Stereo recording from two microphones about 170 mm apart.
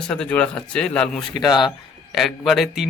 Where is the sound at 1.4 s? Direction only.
25° left (ahead or behind).